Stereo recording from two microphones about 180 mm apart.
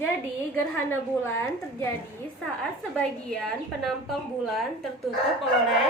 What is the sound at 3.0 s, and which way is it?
Speech, 5° left (ahead or behind).